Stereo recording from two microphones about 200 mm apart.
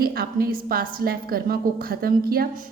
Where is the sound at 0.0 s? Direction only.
50° right (ahead or behind).